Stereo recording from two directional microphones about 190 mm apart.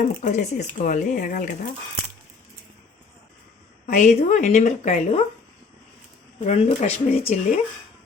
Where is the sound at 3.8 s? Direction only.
40° left (ahead or behind).